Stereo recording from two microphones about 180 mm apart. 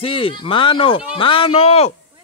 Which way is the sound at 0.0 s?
30° left (ahead or behind).